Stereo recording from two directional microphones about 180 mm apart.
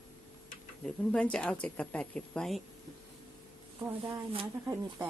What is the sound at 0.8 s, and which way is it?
A woman's voice, 5° left (ahead or behind).